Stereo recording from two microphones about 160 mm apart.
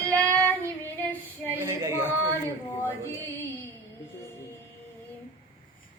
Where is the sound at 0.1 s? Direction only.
10° left (ahead or behind).